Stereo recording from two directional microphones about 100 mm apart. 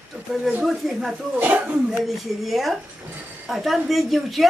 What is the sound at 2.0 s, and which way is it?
Speech, centre (ahead or behind).